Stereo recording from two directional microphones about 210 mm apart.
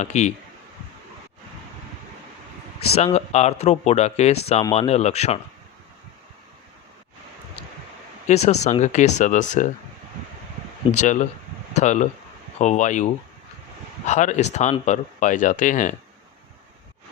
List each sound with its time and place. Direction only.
0.0 s speech: 35° left (ahead or behind)
2.9 s speech: 30° left (ahead or behind)
8.3 s speech: 30° left (ahead or behind)
10.9 s speech: 35° left (ahead or behind)